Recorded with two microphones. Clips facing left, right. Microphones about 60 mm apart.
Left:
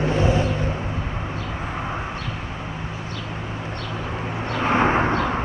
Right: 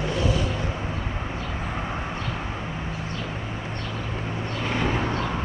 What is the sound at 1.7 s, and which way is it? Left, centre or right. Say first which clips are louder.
Vehicle: left 3 dB; centre.